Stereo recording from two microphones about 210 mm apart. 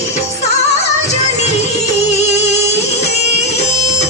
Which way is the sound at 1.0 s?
30° left (ahead or behind).